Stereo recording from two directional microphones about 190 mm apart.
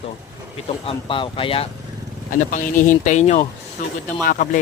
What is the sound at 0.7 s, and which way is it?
Speech, 25° left (ahead or behind).